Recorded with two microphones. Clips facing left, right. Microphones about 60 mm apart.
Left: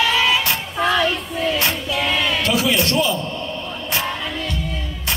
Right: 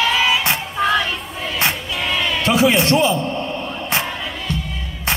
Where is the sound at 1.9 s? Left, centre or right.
Centre.